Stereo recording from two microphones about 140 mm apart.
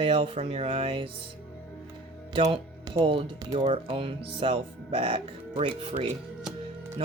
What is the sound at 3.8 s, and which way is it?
Speech, 40° right (ahead or behind).